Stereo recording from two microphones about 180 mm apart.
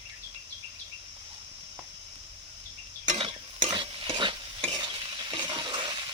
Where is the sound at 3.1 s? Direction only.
30° right (ahead or behind).